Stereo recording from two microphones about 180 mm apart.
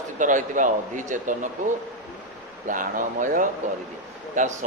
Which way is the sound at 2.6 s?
45° right (ahead or behind).